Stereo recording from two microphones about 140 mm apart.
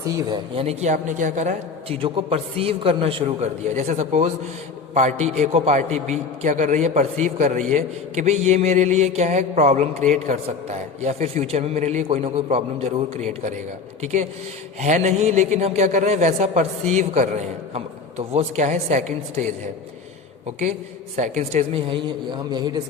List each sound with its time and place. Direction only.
0.0 s speech: 20° right (ahead or behind)
0.5 s a man's voice: 45° right (ahead or behind)
2.0 s a man's voice: 40° right (ahead or behind)
14.8 s a man's voice: 60° right (ahead or behind)
21.2 s a man's voice: 55° right (ahead or behind); by 22.8 s 30° right (ahead or behind)